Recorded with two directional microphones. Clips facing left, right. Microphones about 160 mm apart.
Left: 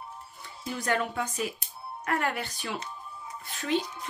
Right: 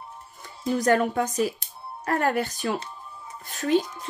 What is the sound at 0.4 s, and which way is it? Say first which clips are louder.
Speech: right 10 dB; 45° right (ahead or behind).